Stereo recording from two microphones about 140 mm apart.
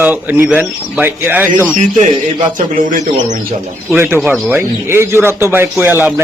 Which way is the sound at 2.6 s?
70° right (ahead or behind).